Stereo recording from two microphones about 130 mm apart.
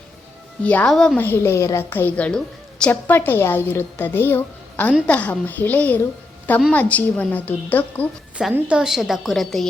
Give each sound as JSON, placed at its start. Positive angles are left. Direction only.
{"t": 0.6, "sound": "a woman's voice", "side_deg": 10}
{"t": 1.2, "sound": "a woman's voice", "side_deg": 15}
{"t": 8.5, "sound": "a woman's voice", "side_deg": -10}